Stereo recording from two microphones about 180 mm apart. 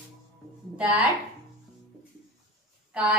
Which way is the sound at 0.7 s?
10° right (ahead or behind).